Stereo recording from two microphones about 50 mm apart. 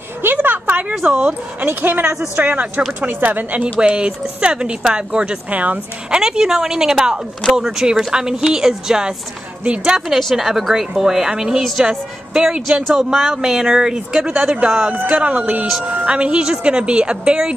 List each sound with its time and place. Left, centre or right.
0.2 s a sound: right
1.7 s speech: right
3.8 s a woman's voice: right
5.5 s speech: right
6.0 s speech: centre
10.0 s a woman's voice: centre